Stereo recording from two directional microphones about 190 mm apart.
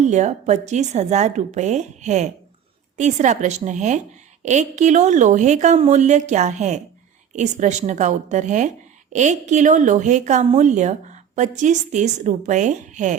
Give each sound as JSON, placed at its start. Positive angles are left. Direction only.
{"t": 0.0, "sound": "a woman's voice", "side_deg": -40}